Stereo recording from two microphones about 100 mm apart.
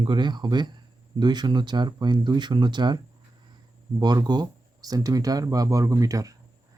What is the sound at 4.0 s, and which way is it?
Speech, 45° right (ahead or behind).